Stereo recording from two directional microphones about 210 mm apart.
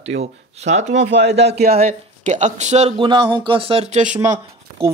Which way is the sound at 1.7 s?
35° right (ahead or behind).